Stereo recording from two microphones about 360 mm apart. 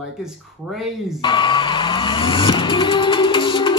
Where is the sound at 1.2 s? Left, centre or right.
Centre.